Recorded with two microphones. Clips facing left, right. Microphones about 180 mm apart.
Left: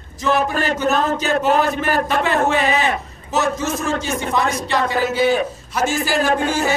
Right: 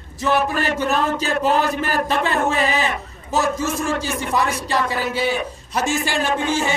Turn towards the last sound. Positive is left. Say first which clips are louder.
# left 2 dB
turn(degrees=45)  # may be behind; listen again after turning